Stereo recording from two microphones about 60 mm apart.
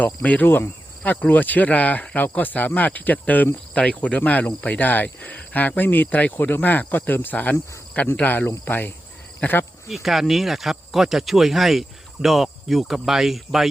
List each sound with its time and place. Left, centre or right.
0.0 s speech: left
0.4 s insect: left
1.1 s speech: left
9.9 s speech: centre